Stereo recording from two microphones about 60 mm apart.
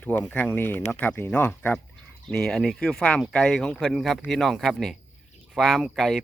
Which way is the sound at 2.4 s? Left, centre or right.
Centre.